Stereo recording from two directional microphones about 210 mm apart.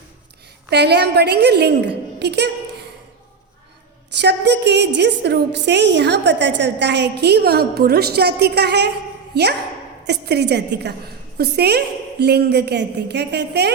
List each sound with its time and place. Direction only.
0.7 s a woman's voice: 50° right (ahead or behind)
4.1 s a woman's voice: 55° right (ahead or behind)